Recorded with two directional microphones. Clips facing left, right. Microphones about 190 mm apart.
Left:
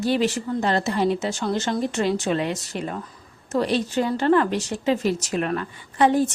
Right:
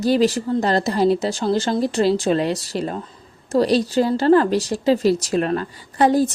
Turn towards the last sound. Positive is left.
turn(degrees=-35)  # may be behind; listen again after turning